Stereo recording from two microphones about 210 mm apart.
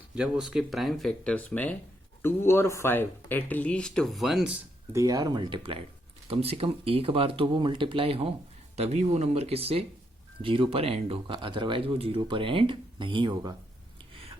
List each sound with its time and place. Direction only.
0.1 s speech: 5° right (ahead or behind)
4.9 s speech: 15° right (ahead or behind)
14.1 s a sound: 25° right (ahead or behind)